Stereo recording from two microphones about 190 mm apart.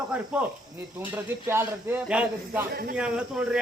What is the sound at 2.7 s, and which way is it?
Speech, 55° right (ahead or behind).